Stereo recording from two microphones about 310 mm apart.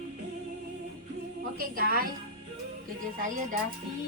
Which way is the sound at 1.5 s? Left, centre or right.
Right.